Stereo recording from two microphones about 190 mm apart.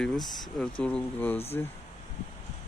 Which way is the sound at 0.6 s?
5° left (ahead or behind).